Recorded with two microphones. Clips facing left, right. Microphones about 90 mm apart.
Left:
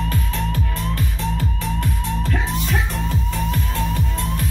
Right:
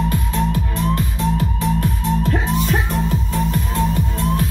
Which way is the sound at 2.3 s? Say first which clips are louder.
Right 4 dB; 30° right (ahead or behind).